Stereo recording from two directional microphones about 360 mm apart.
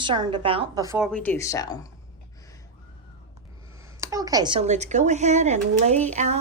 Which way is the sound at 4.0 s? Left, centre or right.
Centre.